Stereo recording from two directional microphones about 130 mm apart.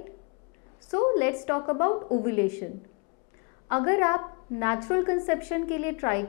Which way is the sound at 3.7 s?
20° left (ahead or behind).